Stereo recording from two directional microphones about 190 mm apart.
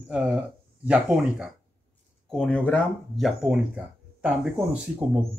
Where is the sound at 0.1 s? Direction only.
5° right (ahead or behind).